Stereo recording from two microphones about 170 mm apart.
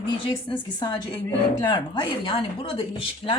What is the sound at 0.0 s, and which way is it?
A woman's voice, 25° left (ahead or behind).